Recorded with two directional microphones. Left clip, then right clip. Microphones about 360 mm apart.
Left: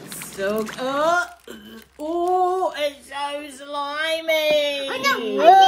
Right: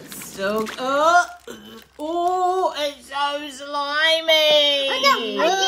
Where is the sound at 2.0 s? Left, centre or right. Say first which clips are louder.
Even; centre.